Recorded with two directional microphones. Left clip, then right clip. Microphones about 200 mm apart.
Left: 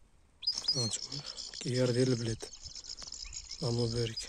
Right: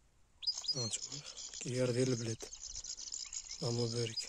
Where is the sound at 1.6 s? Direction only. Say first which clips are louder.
Left 4 dB; centre (ahead or behind).